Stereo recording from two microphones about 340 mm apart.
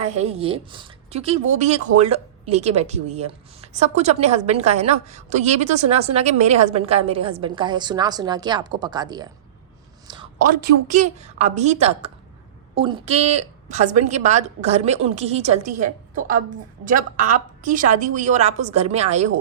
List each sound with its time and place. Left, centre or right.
0.0 s speech: centre
10.1 s a sound: centre
10.6 s speech: right